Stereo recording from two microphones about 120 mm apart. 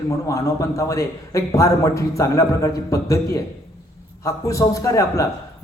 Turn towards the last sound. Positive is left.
turn(degrees=25)  # may be behind; listen again after turning